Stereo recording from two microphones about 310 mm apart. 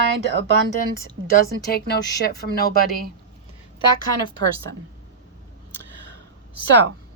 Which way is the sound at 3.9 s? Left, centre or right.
Centre.